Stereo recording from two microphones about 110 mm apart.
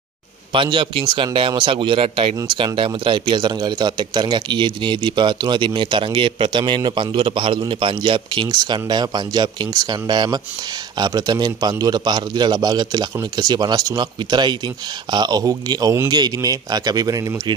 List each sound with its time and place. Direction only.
0.5 s a man's voice: 50° right (ahead or behind)